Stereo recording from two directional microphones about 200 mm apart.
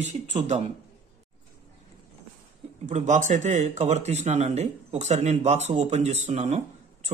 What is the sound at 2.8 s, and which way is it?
Speech, 35° right (ahead or behind).